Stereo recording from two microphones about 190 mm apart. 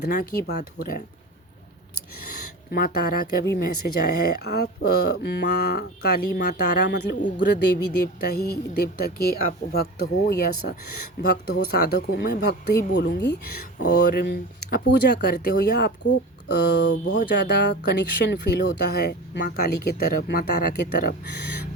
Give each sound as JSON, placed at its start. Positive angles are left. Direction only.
{"t": 0.1, "sound": "speech", "side_deg": 50}
{"t": 2.7, "sound": "speech", "side_deg": 55}